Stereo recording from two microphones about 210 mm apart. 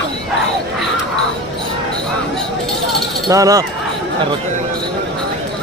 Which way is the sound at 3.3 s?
15° right (ahead or behind).